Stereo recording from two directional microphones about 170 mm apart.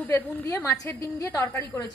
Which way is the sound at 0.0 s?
15° left (ahead or behind).